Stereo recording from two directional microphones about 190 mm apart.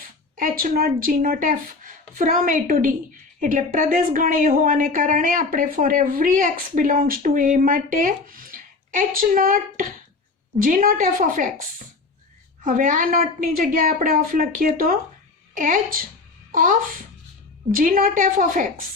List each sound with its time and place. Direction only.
0.3 s a woman's voice: 45° right (ahead or behind)
12.6 s a woman's voice: 45° right (ahead or behind)